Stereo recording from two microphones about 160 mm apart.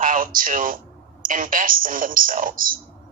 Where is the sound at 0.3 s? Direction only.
60° right (ahead or behind).